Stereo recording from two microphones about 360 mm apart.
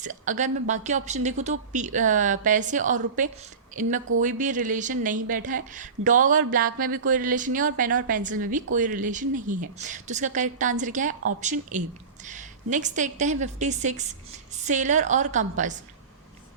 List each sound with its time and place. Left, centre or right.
0.0 s a woman's voice: right